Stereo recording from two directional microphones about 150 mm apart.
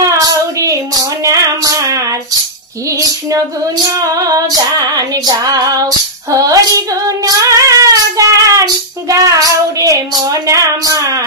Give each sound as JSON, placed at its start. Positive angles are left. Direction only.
{"t": 0.0, "sound": "child singing", "side_deg": -20}
{"t": 1.2, "sound": "female singing", "side_deg": -20}
{"t": 4.1, "sound": "female singing", "side_deg": -25}
{"t": 7.2, "sound": "child singing", "side_deg": -20}
{"t": 10.4, "sound": "female singing", "side_deg": -20}